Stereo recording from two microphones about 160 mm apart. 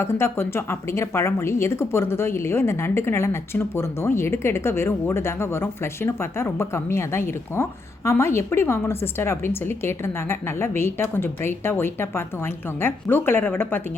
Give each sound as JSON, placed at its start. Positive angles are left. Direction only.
{"t": 0.0, "sound": "a woman's voice", "side_deg": 15}